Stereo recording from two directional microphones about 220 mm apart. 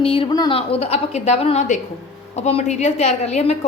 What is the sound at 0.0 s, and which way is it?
A woman's voice, 25° left (ahead or behind).